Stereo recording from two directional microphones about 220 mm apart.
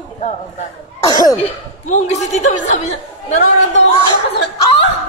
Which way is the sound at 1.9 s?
30° left (ahead or behind).